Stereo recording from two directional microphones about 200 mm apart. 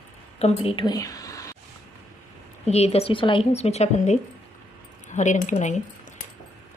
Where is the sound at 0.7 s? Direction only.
25° left (ahead or behind).